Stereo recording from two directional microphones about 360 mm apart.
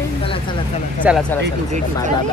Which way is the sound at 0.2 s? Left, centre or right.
Centre.